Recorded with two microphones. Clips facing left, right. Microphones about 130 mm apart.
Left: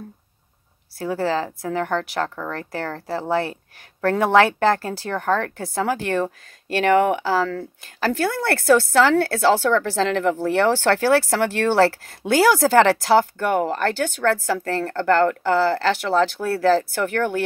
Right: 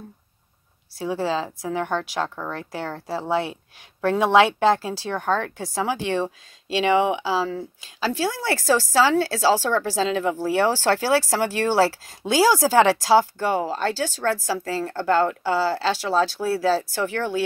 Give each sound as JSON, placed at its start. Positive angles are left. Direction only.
{"t": 0.9, "sound": "speech", "side_deg": 55}